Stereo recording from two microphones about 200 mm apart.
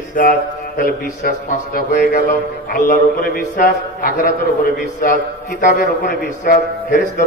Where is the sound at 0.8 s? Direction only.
45° left (ahead or behind).